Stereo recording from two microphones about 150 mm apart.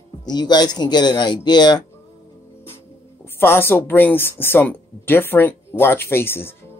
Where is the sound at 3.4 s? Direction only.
15° left (ahead or behind).